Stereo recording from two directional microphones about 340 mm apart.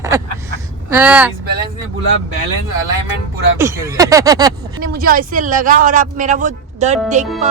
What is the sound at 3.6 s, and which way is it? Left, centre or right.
Speech, centre.